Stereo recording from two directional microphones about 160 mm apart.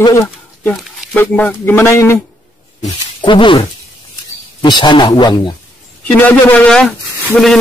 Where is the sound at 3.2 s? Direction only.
30° left (ahead or behind).